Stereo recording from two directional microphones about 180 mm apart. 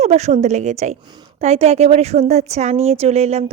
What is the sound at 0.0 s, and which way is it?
A woman's voice, 35° right (ahead or behind).